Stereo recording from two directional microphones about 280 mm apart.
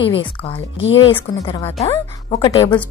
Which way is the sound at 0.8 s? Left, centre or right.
Left.